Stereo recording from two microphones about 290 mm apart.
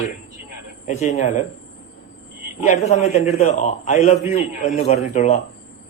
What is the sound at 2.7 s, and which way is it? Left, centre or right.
A man's voice, left.